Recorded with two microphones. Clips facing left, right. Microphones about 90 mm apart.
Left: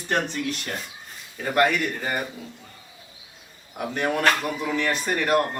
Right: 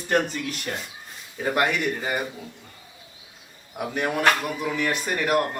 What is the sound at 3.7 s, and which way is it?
Speech, 10° right (ahead or behind).